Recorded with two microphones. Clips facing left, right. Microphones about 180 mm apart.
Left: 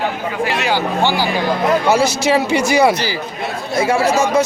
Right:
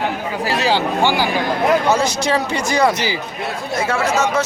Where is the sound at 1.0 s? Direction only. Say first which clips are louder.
Even; 15° right (ahead or behind).